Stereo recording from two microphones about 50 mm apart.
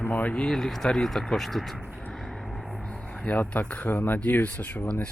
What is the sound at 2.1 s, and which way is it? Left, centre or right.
Vehicle, centre.